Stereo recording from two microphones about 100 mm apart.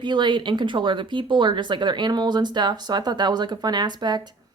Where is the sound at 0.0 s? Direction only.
50° right (ahead or behind).